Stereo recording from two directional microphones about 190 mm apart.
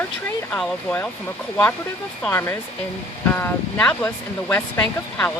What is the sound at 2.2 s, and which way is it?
Speech, 10° left (ahead or behind).